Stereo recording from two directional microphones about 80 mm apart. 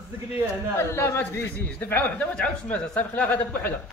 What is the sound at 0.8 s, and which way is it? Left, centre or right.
A woman's voice, left.